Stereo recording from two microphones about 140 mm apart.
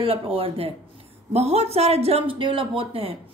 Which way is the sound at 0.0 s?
40° right (ahead or behind).